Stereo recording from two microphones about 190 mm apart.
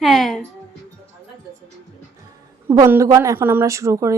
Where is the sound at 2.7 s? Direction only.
15° right (ahead or behind).